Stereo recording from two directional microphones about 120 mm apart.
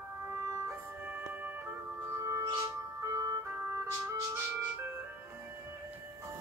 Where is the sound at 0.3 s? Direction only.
30° right (ahead or behind).